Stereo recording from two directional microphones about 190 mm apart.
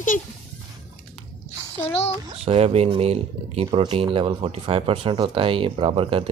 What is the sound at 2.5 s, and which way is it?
Speech, 30° right (ahead or behind).